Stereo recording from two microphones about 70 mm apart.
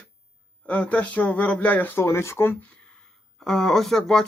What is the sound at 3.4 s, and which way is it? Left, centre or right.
Speech, centre.